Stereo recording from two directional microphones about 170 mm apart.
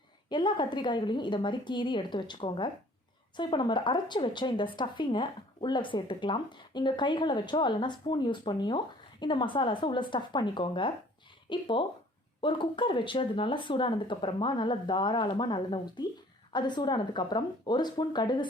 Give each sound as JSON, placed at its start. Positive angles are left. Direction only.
{"t": 0.3, "sound": "a woman's voice", "side_deg": 25}